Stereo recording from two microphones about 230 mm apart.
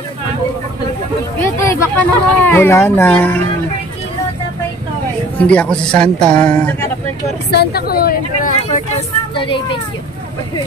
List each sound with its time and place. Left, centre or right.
1.4 s speech: centre
5.4 s a man's voice: centre
7.5 s speech: left
9.3 s a child's voice: left